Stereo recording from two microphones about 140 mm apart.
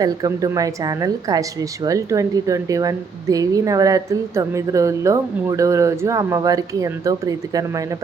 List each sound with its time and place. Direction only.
0.0 s a woman's voice: 25° right (ahead or behind)